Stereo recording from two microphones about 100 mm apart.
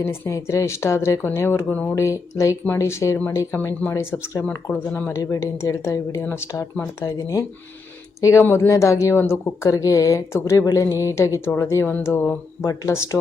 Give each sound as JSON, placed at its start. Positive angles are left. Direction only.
{"t": 0.0, "sound": "speech", "side_deg": 30}
{"t": 2.0, "sound": "speech", "side_deg": 30}
{"t": 11.9, "sound": "speech", "side_deg": 15}
{"t": 12.6, "sound": "speech", "side_deg": 30}